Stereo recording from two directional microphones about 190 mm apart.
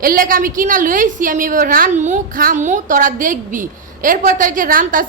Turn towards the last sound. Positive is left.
turn(degrees=-45)  # may be behind; listen again after turning